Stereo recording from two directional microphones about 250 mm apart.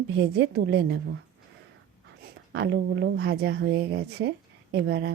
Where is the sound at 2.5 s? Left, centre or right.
Right.